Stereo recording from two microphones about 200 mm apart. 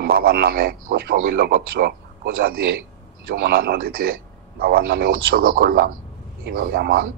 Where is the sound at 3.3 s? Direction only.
50° right (ahead or behind).